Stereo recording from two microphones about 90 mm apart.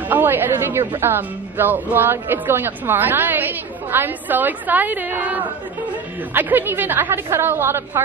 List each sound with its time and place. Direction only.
0.1 s a woman's voice: 20° right (ahead or behind)